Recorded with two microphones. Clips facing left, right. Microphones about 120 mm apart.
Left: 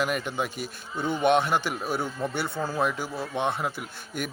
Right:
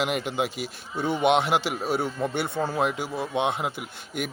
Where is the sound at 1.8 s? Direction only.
25° right (ahead or behind).